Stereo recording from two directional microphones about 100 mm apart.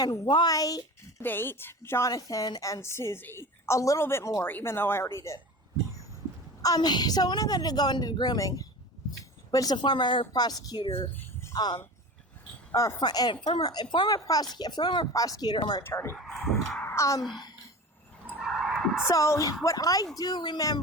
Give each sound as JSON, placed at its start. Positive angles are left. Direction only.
{"t": 0.3, "sound": "speech", "side_deg": 50}
{"t": 0.5, "sound": "a woman's voice", "side_deg": 35}
{"t": 1.2, "sound": "a woman's voice", "side_deg": 20}
{"t": 2.0, "sound": "a woman's voice", "side_deg": 35}
{"t": 6.6, "sound": "a woman's voice", "side_deg": 40}
{"t": 10.8, "sound": "speech", "side_deg": 65}
{"t": 12.7, "sound": "a woman's voice", "side_deg": 35}
{"t": 15.8, "sound": "a woman's voice", "side_deg": 25}
{"t": 16.1, "sound": "speech", "side_deg": -5}
{"t": 16.8, "sound": "a woman's voice", "side_deg": 30}
{"t": 18.3, "sound": "skidding", "side_deg": -5}
{"t": 19.0, "sound": "a woman's voice", "side_deg": 30}